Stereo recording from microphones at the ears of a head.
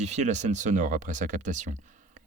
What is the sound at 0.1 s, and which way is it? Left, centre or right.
Speech, right.